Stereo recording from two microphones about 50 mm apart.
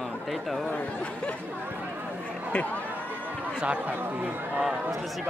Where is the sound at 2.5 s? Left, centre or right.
Left.